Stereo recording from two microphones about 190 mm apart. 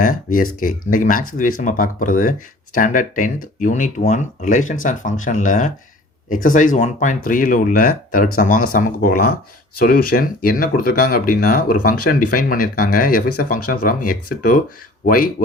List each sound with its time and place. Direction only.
0.0 s speech: 45° left (ahead or behind)